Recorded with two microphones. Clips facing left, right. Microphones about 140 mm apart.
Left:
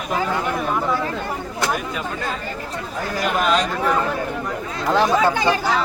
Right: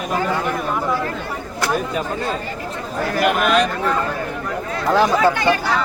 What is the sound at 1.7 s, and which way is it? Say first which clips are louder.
Speech: right 4 dB; 35° right (ahead or behind).